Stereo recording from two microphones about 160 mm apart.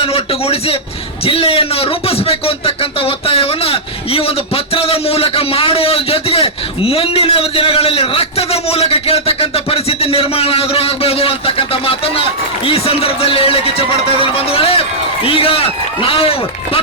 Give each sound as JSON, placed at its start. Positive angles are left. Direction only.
{"t": 0.0, "sound": "a man's voice", "side_deg": 35}